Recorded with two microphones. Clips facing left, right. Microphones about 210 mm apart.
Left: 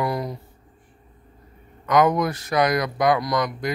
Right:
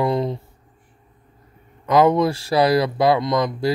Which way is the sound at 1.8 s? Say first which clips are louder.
Right 3 dB; 30° right (ahead or behind).